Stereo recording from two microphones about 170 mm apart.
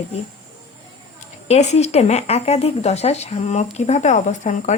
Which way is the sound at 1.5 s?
40° left (ahead or behind).